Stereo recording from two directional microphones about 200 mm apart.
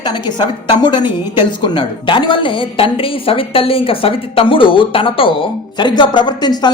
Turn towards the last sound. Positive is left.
turn(degrees=20)  # may be behind; listen again after turning